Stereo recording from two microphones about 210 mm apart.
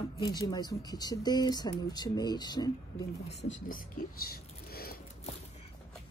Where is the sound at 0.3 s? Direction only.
20° left (ahead or behind).